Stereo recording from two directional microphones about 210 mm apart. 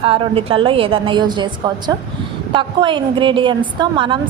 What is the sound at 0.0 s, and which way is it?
A woman's voice, 25° right (ahead or behind).